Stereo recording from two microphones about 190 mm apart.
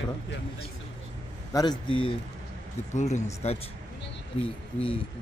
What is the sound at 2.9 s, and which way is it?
Speech, 40° left (ahead or behind).